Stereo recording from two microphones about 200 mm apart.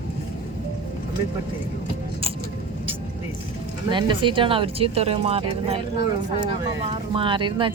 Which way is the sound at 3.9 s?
25° right (ahead or behind).